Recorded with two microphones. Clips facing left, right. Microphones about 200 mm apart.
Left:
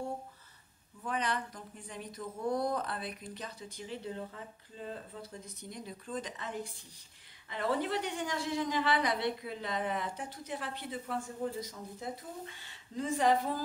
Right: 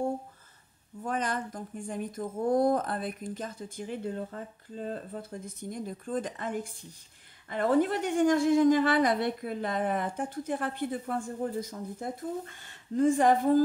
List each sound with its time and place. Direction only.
1.0 s a woman's voice: 45° right (ahead or behind)